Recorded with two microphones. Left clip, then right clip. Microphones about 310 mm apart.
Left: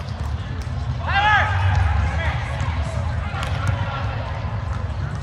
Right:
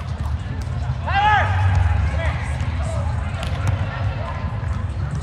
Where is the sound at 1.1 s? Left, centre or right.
Centre.